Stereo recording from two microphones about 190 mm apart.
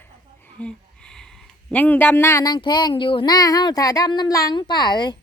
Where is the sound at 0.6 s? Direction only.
5° left (ahead or behind); by 5.1 s 20° left (ahead or behind).